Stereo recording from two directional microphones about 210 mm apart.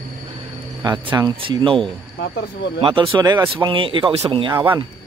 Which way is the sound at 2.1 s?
55° left (ahead or behind).